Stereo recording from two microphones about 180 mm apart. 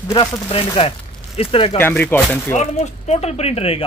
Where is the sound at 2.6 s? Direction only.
40° left (ahead or behind).